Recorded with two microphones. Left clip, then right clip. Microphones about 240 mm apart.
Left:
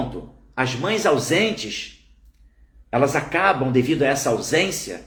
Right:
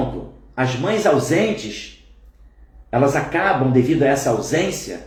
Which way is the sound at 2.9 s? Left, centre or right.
Centre.